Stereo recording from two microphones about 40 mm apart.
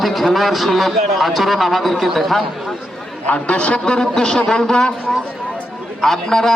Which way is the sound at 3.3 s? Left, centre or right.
Left.